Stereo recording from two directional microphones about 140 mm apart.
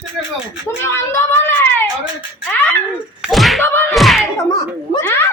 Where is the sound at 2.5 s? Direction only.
15° left (ahead or behind).